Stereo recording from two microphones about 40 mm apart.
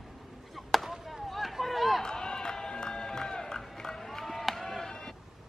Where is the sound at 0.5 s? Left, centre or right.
Centre.